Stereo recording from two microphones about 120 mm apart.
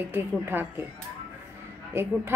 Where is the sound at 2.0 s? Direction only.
20° right (ahead or behind).